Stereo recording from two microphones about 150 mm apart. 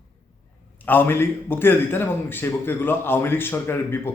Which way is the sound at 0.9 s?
15° left (ahead or behind).